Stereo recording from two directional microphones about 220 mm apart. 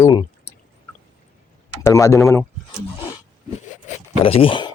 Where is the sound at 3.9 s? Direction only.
25° left (ahead or behind).